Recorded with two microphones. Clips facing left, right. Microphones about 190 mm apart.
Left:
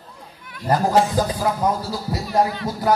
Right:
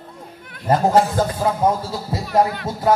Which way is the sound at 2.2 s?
55° right (ahead or behind).